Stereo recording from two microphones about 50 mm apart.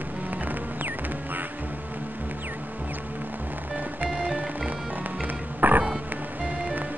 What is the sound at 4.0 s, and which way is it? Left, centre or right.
Music, right.